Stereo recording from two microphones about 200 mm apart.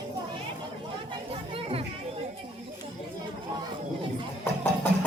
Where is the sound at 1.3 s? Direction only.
30° right (ahead or behind).